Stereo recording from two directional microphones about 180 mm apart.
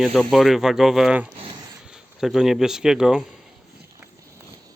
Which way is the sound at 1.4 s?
20° right (ahead or behind).